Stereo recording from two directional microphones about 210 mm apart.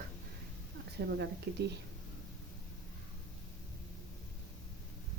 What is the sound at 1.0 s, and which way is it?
Speech, 55° right (ahead or behind).